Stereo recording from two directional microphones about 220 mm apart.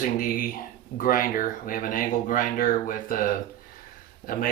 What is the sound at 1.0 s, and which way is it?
Speech, 40° left (ahead or behind).